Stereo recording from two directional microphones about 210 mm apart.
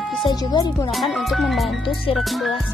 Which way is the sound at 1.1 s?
Centre (ahead or behind).